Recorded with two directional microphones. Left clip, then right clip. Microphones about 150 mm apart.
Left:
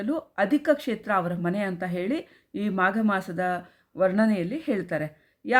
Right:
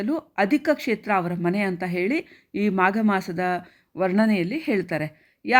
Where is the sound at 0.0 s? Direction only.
20° right (ahead or behind).